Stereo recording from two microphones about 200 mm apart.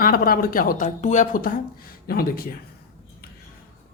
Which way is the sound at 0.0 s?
45° left (ahead or behind).